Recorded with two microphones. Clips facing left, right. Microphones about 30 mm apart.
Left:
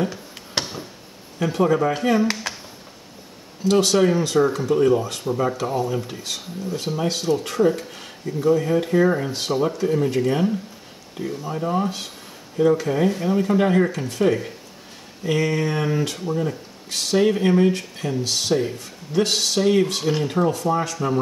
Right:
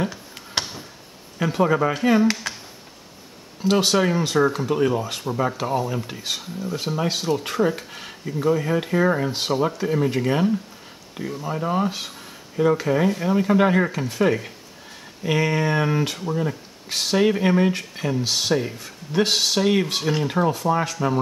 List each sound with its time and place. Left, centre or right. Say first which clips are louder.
0.1 s a sound: even; centre
1.4 s speech: left 1 dB; centre
2.2 s speech: right 2 dB; centre
3.6 s speech: left 2 dB; centre
19.1 s speech: even; centre